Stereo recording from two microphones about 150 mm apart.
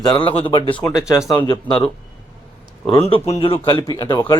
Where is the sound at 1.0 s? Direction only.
20° left (ahead or behind).